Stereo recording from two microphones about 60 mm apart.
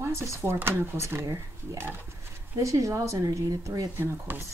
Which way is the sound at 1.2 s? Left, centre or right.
Right.